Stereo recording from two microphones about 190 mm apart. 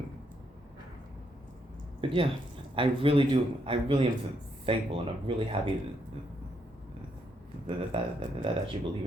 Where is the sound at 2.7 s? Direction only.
30° right (ahead or behind).